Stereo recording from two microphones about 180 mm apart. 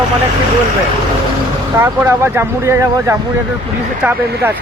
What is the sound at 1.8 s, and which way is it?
Speech, 15° right (ahead or behind).